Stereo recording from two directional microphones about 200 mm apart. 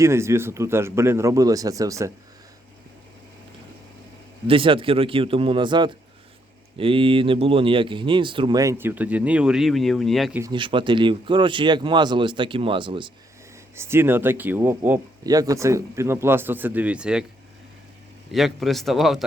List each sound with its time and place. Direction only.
0.0 s speech: 15° right (ahead or behind)
4.4 s speech: 25° right (ahead or behind); by 10.4 s centre (ahead or behind)
10.4 s speech: 25° right (ahead or behind)
13.7 s speech: 10° right (ahead or behind)
18.3 s a man's voice: centre (ahead or behind)